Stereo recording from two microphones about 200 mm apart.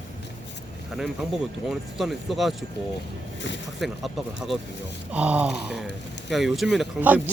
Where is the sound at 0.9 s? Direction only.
Centre (ahead or behind).